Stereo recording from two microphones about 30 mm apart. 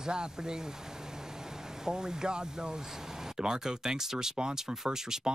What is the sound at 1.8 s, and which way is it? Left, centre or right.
Speech, right.